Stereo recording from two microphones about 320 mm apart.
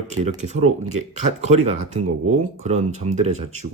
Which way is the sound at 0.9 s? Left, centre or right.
Right.